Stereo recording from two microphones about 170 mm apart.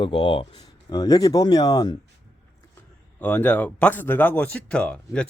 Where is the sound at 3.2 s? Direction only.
10° left (ahead or behind).